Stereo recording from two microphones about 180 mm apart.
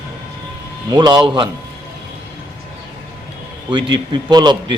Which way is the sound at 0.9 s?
25° right (ahead or behind).